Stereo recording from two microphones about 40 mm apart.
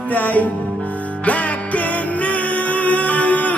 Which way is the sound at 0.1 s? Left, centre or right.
Left.